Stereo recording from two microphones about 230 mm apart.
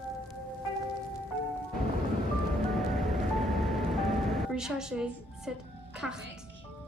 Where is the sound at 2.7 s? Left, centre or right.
Centre.